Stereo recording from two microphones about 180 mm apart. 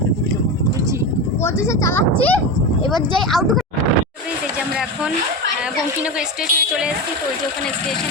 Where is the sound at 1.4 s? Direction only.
15° left (ahead or behind); by 3.6 s centre (ahead or behind).